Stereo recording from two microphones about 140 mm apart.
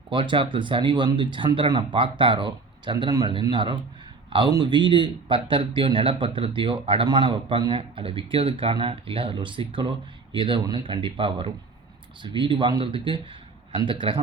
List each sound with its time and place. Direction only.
0.1 s speech: 40° right (ahead or behind)